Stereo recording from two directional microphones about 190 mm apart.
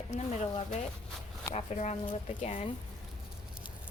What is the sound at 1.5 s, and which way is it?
A woman's voice, 35° left (ahead or behind).